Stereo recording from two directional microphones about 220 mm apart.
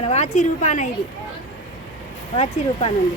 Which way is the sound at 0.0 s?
30° left (ahead or behind).